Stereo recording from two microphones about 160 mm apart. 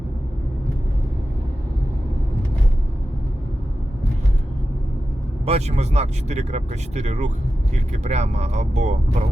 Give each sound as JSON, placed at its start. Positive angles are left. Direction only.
{"t": 5.5, "sound": "speech", "side_deg": -45}